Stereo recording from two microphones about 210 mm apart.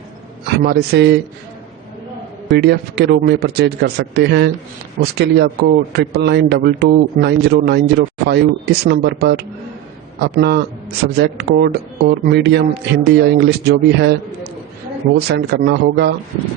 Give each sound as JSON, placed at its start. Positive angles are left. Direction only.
{"t": 0.4, "sound": "speech", "side_deg": -50}
{"t": 2.5, "sound": "speech", "side_deg": -50}